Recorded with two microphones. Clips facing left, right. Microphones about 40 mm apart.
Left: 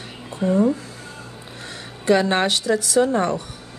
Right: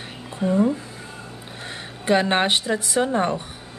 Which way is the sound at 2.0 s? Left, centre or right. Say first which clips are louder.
Left 1 dB; centre.